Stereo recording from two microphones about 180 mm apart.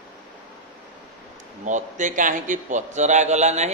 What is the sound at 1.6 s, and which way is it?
A man's voice, 45° right (ahead or behind).